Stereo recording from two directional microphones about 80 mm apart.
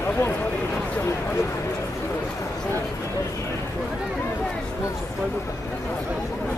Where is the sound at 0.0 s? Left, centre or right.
Left.